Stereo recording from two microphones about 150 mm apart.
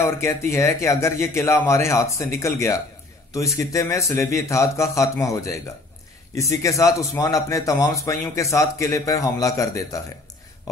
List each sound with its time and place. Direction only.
0.0 s speech: 15° left (ahead or behind)